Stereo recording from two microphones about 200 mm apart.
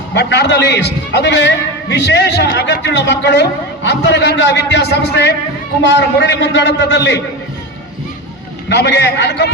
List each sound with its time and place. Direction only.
0.1 s a man's voice: 55° left (ahead or behind)
8.7 s a man's voice: 55° left (ahead or behind)